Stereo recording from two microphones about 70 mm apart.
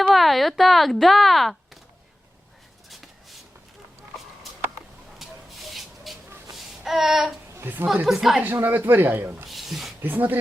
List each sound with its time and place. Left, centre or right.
0.1 s speech: centre
5.2 s a sound: centre
7.6 s a woman's voice: right
8.0 s a woman's voice: centre
8.4 s speech: right
9.5 s a sound: centre
10.0 s speech: right